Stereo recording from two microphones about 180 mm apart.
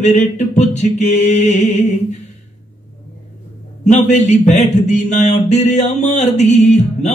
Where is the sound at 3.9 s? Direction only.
40° left (ahead or behind).